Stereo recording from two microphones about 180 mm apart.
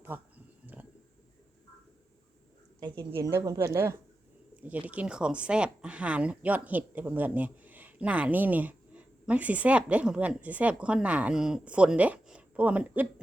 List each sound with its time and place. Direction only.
0.1 s speech: 10° right (ahead or behind)
0.7 s a sound: 5° right (ahead or behind)
2.8 s a woman's voice: 25° right (ahead or behind); by 13.2 s 5° right (ahead or behind)